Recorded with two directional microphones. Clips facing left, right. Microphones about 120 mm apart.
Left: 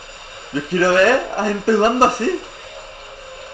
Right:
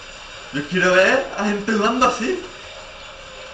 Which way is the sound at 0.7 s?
40° left (ahead or behind).